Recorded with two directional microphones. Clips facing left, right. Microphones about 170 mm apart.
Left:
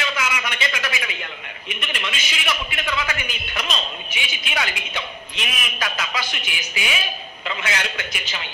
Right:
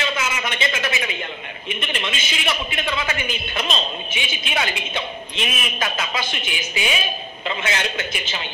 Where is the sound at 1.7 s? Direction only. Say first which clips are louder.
Right 3 dB; 25° right (ahead or behind).